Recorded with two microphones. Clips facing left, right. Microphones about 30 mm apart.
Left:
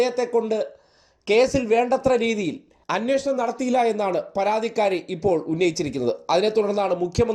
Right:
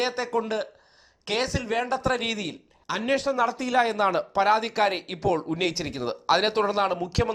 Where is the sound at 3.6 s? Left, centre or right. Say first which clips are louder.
Left 4 dB; right.